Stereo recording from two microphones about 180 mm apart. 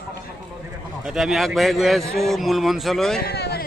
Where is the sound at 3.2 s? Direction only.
60° left (ahead or behind).